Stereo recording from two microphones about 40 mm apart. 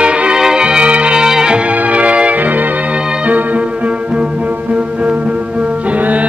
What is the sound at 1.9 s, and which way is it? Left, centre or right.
Music, right.